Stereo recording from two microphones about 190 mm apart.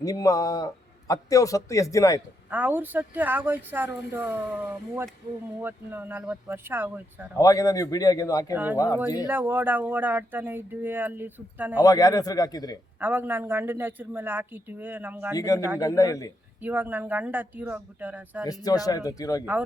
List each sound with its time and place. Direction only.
0.0 s a man's voice: 20° left (ahead or behind)
2.5 s speech: 10° right (ahead or behind)
5.6 s speech: 10° right (ahead or behind)
7.3 s speech: 20° left (ahead or behind)
8.5 s speech: 10° right (ahead or behind)
11.8 s speech: 20° left (ahead or behind)
13.0 s speech: 10° right (ahead or behind)
15.4 s a man's voice: 15° left (ahead or behind)
16.6 s speech: 10° right (ahead or behind)
18.4 s speech: 20° left (ahead or behind)